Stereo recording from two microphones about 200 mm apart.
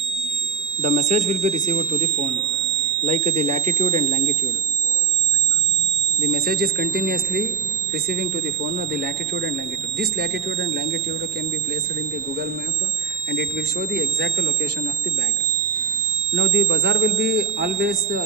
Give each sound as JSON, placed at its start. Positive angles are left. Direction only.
{"t": 0.8, "sound": "speech", "side_deg": -35}
{"t": 6.2, "sound": "speech", "side_deg": -50}
{"t": 10.0, "sound": "speech", "side_deg": -50}
{"t": 13.9, "sound": "a man's voice", "side_deg": -55}
{"t": 16.3, "sound": "a man's voice", "side_deg": -65}